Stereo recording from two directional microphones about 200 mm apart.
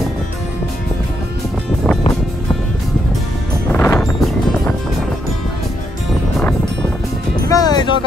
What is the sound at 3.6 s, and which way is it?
Music, 10° left (ahead or behind).